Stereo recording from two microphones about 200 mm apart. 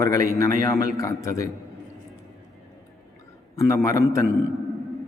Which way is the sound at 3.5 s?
15° left (ahead or behind).